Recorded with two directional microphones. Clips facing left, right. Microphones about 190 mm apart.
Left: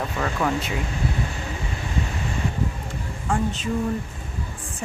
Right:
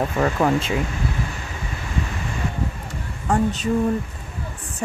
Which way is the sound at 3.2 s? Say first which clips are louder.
Right 4 dB; 40° right (ahead or behind).